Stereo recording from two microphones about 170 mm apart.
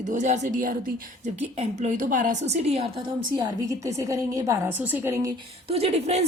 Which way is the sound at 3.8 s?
20° right (ahead or behind).